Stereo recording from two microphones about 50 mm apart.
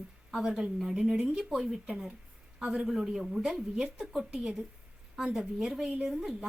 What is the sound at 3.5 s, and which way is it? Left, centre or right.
A woman's voice, right.